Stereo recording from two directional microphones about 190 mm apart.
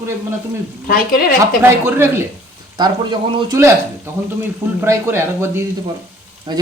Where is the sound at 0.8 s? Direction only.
50° left (ahead or behind).